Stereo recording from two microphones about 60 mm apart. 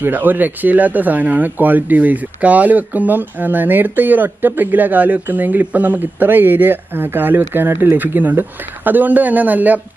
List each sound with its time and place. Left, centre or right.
0.0 s speech: right